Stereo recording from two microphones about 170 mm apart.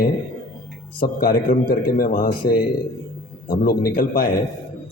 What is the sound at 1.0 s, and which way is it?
A man's voice, 60° left (ahead or behind).